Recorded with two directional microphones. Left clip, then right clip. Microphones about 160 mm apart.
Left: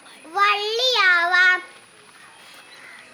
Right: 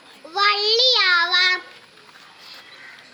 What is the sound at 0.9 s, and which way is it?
Child singing, 15° left (ahead or behind).